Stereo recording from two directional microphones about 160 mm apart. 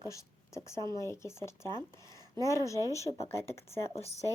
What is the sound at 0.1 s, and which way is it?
A woman's voice, 20° left (ahead or behind).